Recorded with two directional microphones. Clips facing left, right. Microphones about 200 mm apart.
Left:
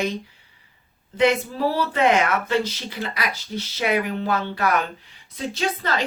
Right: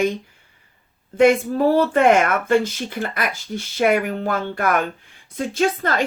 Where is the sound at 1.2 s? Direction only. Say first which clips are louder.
Right 5 dB; 50° right (ahead or behind).